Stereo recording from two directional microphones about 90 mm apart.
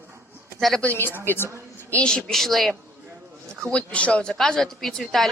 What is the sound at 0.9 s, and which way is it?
Speech, 25° left (ahead or behind).